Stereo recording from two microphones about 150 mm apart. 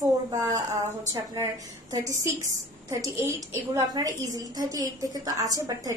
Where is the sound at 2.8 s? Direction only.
20° right (ahead or behind).